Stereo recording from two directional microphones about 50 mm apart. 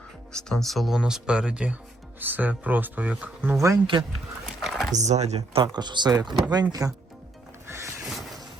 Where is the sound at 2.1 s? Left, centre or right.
Right.